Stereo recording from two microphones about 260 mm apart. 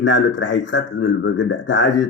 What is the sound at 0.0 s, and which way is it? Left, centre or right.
A man's voice, left.